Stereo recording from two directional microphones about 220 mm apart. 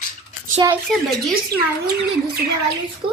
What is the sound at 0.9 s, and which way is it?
Speech, centre (ahead or behind).